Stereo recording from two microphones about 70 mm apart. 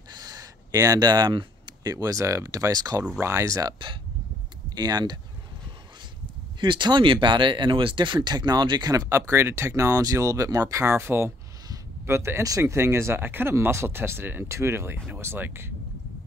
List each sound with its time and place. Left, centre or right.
0.1 s a sound: right
0.9 s speech: right
3.2 s speech: right
4.7 s speech: right
6.8 s speech: right
9.1 s speech: right